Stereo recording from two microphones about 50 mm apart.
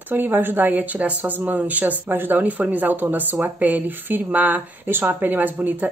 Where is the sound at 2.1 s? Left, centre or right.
Right.